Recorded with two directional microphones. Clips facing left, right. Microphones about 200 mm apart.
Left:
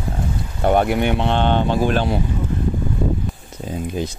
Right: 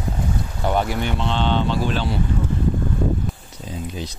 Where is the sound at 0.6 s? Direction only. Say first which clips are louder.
Left 6 dB; 55° left (ahead or behind).